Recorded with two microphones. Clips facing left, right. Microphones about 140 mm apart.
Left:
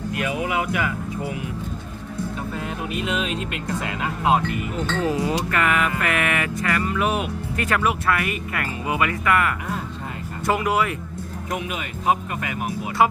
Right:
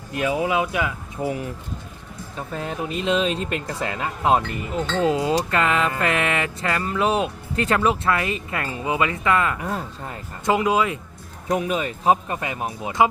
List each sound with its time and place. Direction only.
0.1 s speech: 30° right (ahead or behind)
2.6 s speech: 30° right (ahead or behind)
4.7 s speech: 25° right (ahead or behind)
11.5 s speech: 35° right (ahead or behind)